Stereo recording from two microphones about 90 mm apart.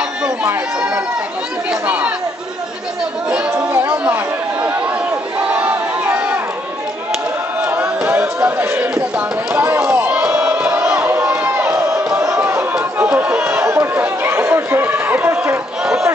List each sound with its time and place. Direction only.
1.7 s chatter: 15° right (ahead or behind)
3.5 s chatter: 25° right (ahead or behind)
5.5 s a sound: 20° right (ahead or behind)
7.6 s crowd: 20° right (ahead or behind)
9.5 s chop: 25° right (ahead or behind)
10.2 s crowd: 15° right (ahead or behind)
11.7 s crowd: 35° right (ahead or behind)
13.0 s chatter: 15° right (ahead or behind)
13.5 s chatter: 30° right (ahead or behind)
15.8 s a sound: 5° right (ahead or behind)